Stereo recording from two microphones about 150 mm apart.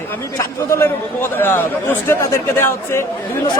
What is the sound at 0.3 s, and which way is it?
Speech, 20° left (ahead or behind).